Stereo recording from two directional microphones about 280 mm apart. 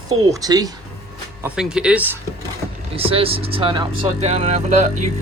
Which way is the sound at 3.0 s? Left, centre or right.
Centre.